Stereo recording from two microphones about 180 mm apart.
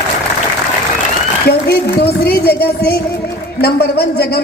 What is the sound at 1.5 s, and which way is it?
A man's voice, 60° left (ahead or behind).